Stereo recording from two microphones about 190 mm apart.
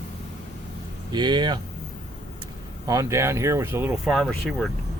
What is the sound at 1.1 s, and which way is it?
Speech, 25° right (ahead or behind).